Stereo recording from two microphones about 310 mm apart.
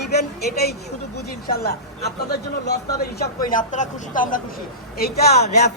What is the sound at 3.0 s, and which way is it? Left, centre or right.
A man's voice, left.